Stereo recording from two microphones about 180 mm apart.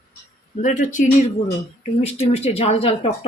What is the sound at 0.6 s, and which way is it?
Speech, 45° left (ahead or behind).